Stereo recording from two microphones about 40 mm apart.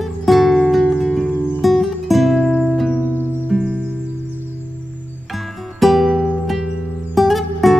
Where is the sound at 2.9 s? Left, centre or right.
Left.